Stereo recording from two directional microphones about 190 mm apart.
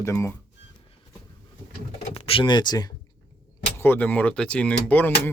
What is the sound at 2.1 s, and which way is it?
Speech, 30° left (ahead or behind).